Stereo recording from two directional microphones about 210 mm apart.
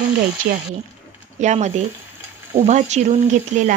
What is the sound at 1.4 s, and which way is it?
A woman's voice, 35° right (ahead or behind).